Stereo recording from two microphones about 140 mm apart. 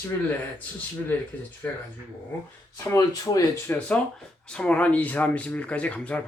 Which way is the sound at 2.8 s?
25° left (ahead or behind).